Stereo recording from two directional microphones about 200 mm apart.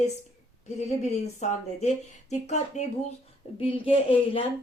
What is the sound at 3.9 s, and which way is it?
Speech, 25° left (ahead or behind).